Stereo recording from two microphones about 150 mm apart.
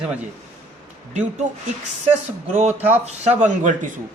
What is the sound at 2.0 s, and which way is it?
Speech, 50° right (ahead or behind).